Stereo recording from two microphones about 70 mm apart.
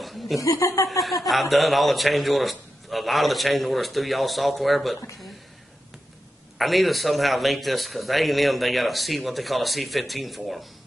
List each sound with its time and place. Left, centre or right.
0.0 s chuckle: centre
0.4 s speech: left
0.8 s a man's voice: centre
6.6 s a man's voice: centre